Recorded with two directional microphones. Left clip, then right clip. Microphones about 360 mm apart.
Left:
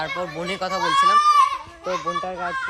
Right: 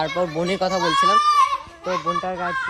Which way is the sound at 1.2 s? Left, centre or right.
Centre.